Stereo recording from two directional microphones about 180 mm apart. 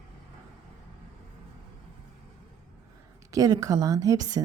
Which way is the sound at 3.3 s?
20° right (ahead or behind).